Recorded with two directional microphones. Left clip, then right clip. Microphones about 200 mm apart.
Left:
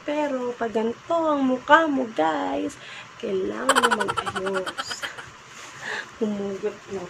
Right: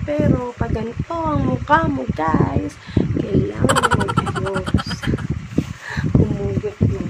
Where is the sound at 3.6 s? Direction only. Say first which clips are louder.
Right 2 dB; centre (ahead or behind).